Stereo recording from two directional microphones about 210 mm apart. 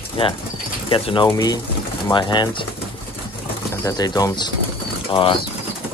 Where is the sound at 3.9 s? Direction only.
20° left (ahead or behind).